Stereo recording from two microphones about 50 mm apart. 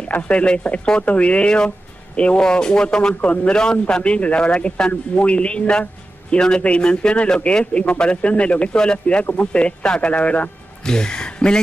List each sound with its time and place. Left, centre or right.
0.1 s a man's voice: left
3.2 s a man's voice: left
10.9 s speech: centre